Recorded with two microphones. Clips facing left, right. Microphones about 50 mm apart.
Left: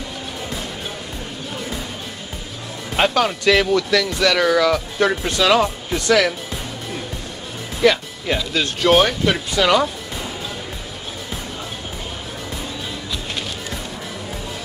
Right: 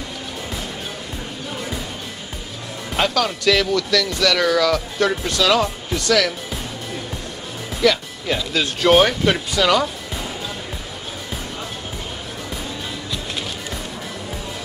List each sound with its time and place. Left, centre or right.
3.0 s speech: left
7.8 s speech: left
8.8 s speech: centre
9.6 s speech: centre